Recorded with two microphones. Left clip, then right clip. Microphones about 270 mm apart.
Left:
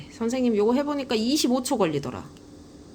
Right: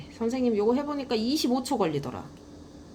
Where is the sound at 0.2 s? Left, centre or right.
Centre.